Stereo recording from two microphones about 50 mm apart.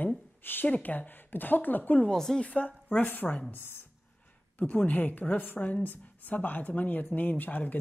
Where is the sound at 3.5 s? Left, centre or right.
Left.